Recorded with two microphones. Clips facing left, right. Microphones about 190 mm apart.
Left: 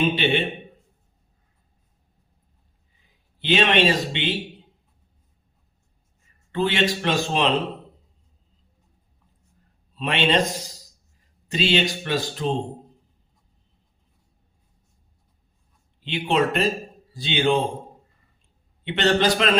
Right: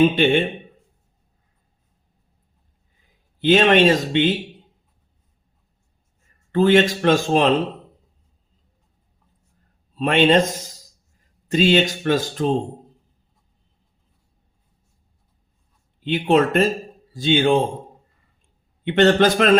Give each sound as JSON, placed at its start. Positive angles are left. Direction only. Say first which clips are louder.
{"t": 0.0, "sound": "speech", "louder": "right 6 dB", "side_deg": -45}
{"t": 3.4, "sound": "speech", "louder": "right 6 dB", "side_deg": -45}
{"t": 6.5, "sound": "speech", "louder": "right 7 dB", "side_deg": -45}
{"t": 9.9, "sound": "speech", "louder": "right 6 dB", "side_deg": -50}
{"t": 16.0, "sound": "speech", "louder": "right 5 dB", "side_deg": -50}
{"t": 18.9, "sound": "speech", "louder": "right 5 dB", "side_deg": -50}